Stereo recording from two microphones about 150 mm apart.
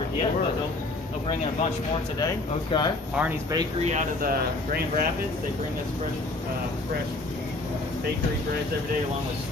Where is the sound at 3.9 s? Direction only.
75° right (ahead or behind).